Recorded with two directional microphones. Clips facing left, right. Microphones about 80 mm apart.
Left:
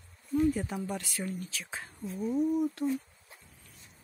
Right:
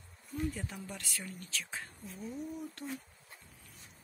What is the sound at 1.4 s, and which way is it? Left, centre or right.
Speech, centre.